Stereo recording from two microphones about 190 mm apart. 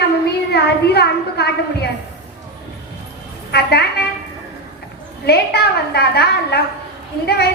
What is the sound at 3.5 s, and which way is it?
Speech, 55° left (ahead or behind).